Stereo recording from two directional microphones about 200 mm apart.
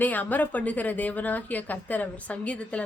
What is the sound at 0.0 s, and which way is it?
Speech, 10° left (ahead or behind).